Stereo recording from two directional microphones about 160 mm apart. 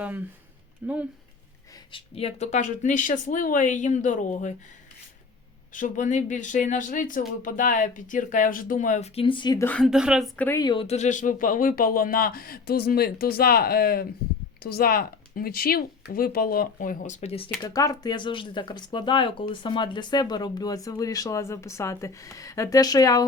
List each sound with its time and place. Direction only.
0.8 s speech: 10° right (ahead or behind)
1.9 s speech: 35° left (ahead or behind)
5.7 s speech: 55° left (ahead or behind); by 9.6 s 30° left (ahead or behind)
9.6 s a woman's voice: 10° left (ahead or behind)
9.8 s speech: 5° right (ahead or behind)
10.3 s a woman's voice: 10° left (ahead or behind)
10.6 s speech: 30° left (ahead or behind)
10.8 s speech: 45° left (ahead or behind)
17.6 s speech: 25° left (ahead or behind)